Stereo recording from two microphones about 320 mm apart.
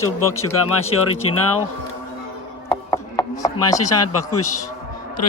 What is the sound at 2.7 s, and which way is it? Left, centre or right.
Chopping, centre.